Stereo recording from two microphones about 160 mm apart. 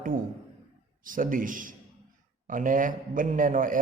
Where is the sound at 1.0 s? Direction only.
55° right (ahead or behind).